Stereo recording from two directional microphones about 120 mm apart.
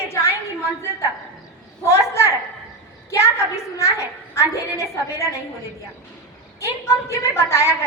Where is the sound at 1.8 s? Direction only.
25° left (ahead or behind).